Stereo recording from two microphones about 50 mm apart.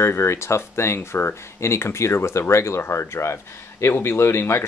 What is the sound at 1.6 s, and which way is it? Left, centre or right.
Speech, left.